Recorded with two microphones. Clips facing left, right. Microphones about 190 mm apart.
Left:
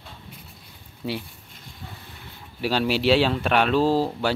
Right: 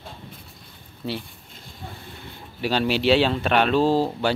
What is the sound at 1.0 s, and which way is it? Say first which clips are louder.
Speech: even; 10° left (ahead or behind).